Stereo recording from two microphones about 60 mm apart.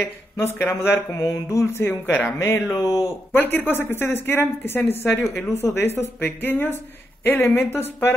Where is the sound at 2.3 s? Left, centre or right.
Left.